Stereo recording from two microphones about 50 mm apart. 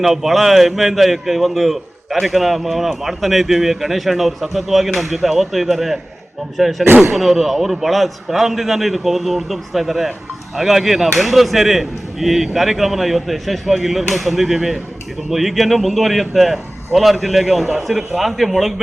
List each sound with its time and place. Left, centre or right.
0.0 s a man's voice: centre
6.8 s speech: right
7.2 s a man's voice: centre